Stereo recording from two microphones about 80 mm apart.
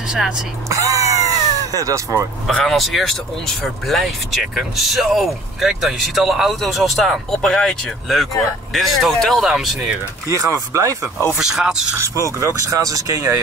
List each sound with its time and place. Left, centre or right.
0.7 s cat: right
2.4 s speech: centre
10.2 s speech: right
11.3 s speech: centre
12.3 s speech: right